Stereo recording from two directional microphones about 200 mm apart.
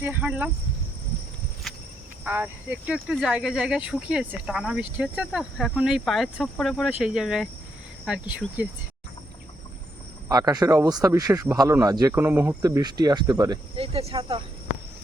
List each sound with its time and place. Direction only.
0.0 s speech: 10° right (ahead or behind)
1.7 s a sound: centre (ahead or behind)
2.2 s speech: 10° right (ahead or behind)
10.2 s speech: 20° right (ahead or behind)
13.7 s speech: 30° right (ahead or behind)